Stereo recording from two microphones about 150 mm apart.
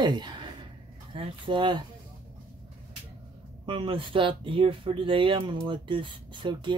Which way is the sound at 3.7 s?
35° right (ahead or behind).